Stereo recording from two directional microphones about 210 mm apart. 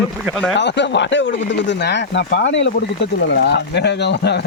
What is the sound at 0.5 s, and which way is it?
Speech, 55° left (ahead or behind).